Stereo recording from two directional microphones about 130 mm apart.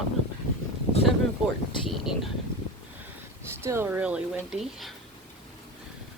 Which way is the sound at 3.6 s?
20° right (ahead or behind).